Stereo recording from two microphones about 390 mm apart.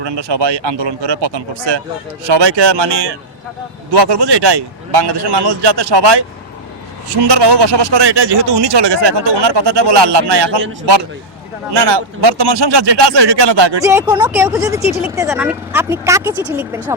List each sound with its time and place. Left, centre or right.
0.0 s a man's voice: right
3.9 s a man's voice: right
11.7 s a man's voice: right
13.8 s speech: centre